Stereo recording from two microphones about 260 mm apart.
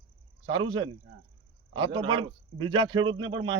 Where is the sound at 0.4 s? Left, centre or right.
Centre.